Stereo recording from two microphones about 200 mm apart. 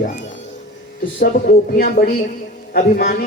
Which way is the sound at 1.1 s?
45° left (ahead or behind).